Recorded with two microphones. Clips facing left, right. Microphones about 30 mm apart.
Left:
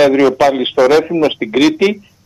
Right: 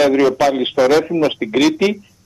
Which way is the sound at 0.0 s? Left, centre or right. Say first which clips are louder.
Left 3 dB; centre.